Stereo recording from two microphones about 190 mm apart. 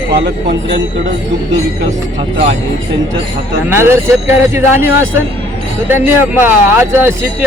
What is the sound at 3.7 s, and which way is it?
Speech, 15° right (ahead or behind).